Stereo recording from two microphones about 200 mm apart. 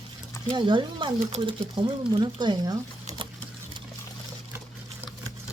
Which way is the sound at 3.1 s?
35° right (ahead or behind).